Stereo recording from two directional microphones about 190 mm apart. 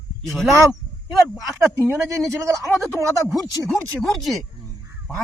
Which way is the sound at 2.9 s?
15° right (ahead or behind).